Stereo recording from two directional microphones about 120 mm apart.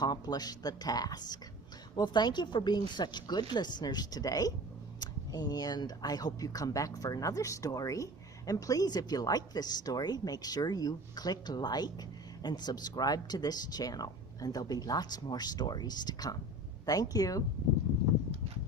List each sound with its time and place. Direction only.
0.0 s speech: 35° left (ahead or behind)